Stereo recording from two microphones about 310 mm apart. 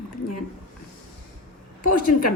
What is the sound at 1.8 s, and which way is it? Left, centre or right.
Speech, left.